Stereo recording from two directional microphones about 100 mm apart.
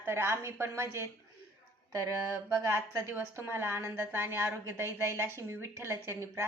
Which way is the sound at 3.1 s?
20° right (ahead or behind).